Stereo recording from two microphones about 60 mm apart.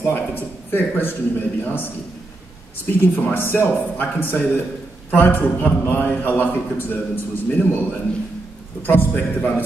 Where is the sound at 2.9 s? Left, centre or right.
Left.